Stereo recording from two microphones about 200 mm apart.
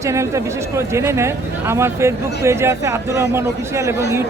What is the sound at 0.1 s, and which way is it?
Speech, 15° right (ahead or behind).